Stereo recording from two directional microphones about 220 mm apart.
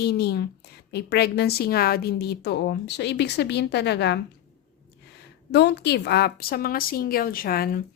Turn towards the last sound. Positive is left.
turn(degrees=40)  # may be behind; listen again after turning